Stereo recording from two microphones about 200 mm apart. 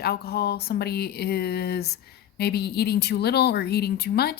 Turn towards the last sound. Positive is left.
turn(degrees=50)  # may be behind; listen again after turning